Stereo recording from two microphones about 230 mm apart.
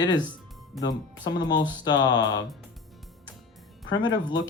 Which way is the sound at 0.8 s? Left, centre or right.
Centre.